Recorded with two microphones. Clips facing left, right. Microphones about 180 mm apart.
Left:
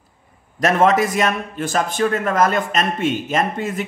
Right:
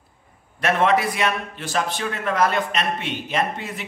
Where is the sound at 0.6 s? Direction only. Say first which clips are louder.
Left 4 dB; 40° left (ahead or behind).